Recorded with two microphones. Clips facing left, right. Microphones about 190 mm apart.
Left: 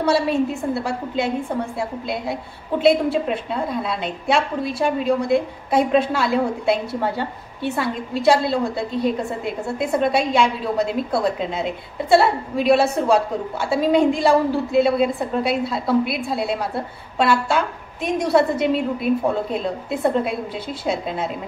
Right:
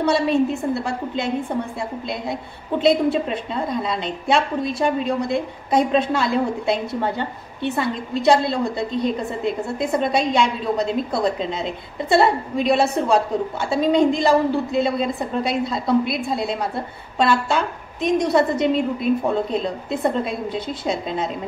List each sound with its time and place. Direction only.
0.0 s a woman's voice: 5° left (ahead or behind)